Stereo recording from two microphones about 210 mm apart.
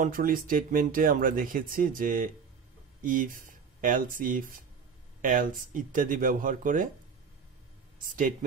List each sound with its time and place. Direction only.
0.0 s speech: 40° right (ahead or behind)
8.0 s speech: 40° right (ahead or behind)